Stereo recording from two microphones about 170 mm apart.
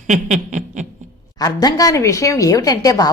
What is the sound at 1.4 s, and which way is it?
A woman's voice, 20° left (ahead or behind).